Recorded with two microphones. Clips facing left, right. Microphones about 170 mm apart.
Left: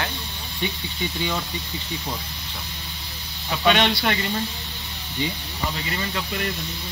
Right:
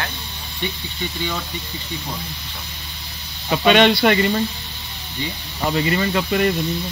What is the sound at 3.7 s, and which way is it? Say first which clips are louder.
Speech: right 8 dB; 80° right.